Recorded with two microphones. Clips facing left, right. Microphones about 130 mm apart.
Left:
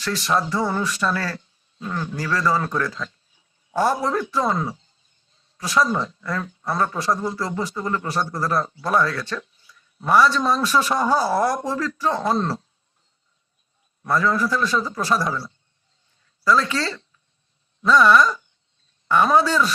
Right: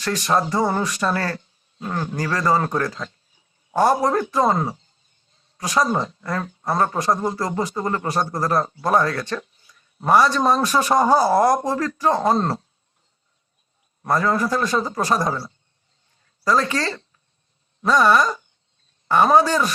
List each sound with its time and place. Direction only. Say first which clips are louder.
0.0 s a man's voice: right 2 dB; 45° right (ahead or behind)
14.0 s a man's voice: right 1 dB; 40° right (ahead or behind)